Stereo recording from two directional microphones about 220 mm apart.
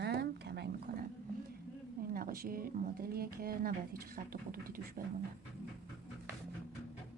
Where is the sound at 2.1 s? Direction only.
40° right (ahead or behind).